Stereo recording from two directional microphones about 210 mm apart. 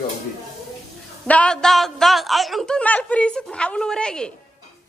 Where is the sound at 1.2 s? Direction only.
5° left (ahead or behind).